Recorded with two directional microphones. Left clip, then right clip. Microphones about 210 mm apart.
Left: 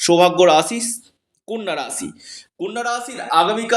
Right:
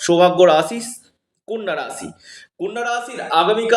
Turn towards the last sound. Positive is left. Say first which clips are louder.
# right 1 dB
turn(degrees=40)  # may be behind; listen again after turning